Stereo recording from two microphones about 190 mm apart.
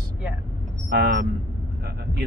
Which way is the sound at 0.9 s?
50° right (ahead or behind).